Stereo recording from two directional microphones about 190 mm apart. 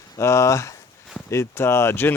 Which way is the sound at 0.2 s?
15° left (ahead or behind).